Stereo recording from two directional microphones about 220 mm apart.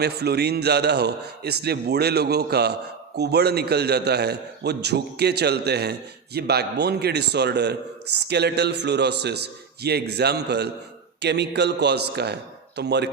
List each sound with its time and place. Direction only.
0.0 s a man's voice: 50° right (ahead or behind)